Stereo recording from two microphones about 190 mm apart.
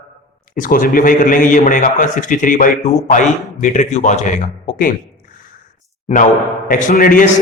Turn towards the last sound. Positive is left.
turn(degrees=45)  # may be behind; listen again after turning